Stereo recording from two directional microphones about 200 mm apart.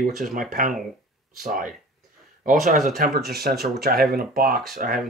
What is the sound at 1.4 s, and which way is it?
Speech, 45° right (ahead or behind).